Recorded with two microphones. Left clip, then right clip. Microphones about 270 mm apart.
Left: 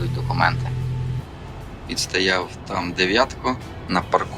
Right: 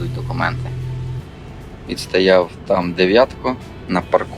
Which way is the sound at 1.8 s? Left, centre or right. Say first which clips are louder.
Right 6 dB; centre.